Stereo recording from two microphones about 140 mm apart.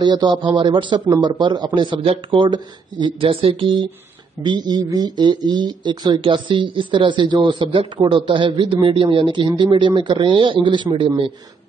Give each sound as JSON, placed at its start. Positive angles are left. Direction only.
{"t": 0.0, "sound": "speech", "side_deg": -35}